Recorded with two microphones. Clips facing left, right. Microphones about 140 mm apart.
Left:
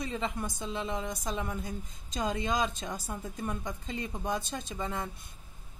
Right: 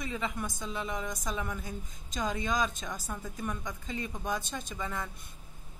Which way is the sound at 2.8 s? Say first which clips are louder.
Left 1 dB; 25° left (ahead or behind).